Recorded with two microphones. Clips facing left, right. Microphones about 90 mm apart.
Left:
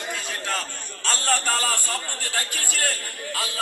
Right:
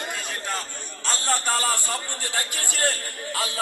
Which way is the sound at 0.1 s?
5° right (ahead or behind).